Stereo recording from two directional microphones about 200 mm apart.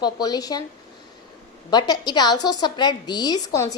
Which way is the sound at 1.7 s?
20° left (ahead or behind).